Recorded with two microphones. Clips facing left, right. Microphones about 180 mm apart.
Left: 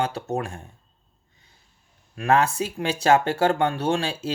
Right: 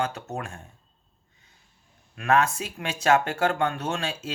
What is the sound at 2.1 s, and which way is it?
Speech, 30° left (ahead or behind).